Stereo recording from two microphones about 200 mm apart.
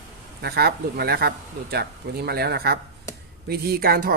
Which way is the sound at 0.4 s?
50° right (ahead or behind).